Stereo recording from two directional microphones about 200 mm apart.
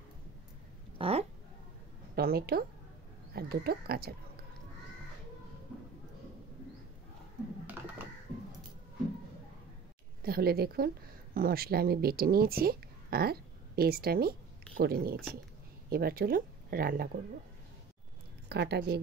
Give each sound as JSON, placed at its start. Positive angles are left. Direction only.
{"t": 0.9, "sound": "a sound", "side_deg": -30}
{"t": 2.1, "sound": "speech", "side_deg": -50}
{"t": 10.2, "sound": "speech", "side_deg": -50}
{"t": 18.5, "sound": "a woman's voice", "side_deg": -55}